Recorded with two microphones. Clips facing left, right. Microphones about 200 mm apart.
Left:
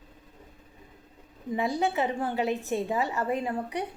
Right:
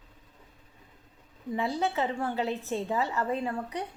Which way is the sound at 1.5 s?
15° left (ahead or behind).